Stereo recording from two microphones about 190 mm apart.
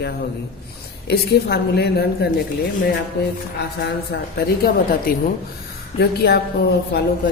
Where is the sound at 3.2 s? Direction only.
60° left (ahead or behind).